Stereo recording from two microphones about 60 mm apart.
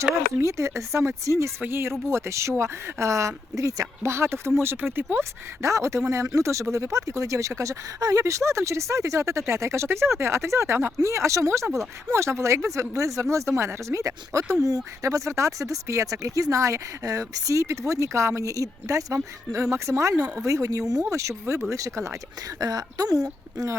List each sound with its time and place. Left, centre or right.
0.4 s speech: right
1.6 s speech: right
4.1 s speech: right
5.6 s speech: right
21.1 s speech: right
22.6 s speech: right